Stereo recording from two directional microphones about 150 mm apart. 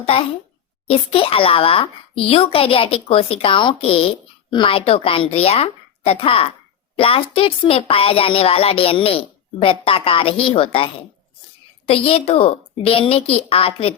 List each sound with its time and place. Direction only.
0.0 s speech: 40° left (ahead or behind)